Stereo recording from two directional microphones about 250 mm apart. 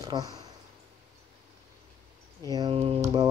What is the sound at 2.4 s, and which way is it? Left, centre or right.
Speech, centre.